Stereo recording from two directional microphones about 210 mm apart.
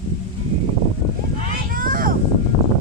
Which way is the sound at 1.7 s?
40° right (ahead or behind).